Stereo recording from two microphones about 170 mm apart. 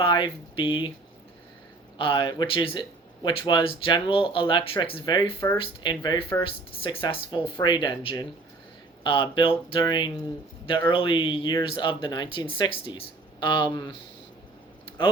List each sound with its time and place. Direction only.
0.0 s speech: 30° left (ahead or behind)
2.0 s speech: 30° left (ahead or behind)